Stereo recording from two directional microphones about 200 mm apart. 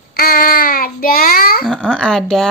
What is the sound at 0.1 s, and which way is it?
Child singing, 50° left (ahead or behind).